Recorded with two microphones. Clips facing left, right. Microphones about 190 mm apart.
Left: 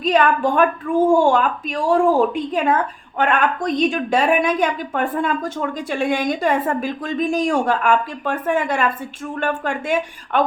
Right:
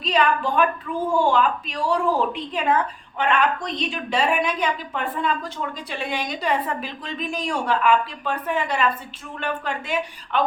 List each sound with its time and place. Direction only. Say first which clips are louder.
0.0 s a woman's voice: left 5 dB; 50° left (ahead or behind)